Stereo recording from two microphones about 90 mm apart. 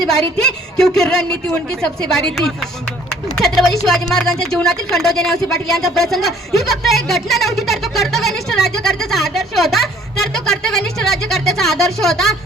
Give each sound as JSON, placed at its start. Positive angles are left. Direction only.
{"t": 0.3, "sound": "speech", "side_deg": 5}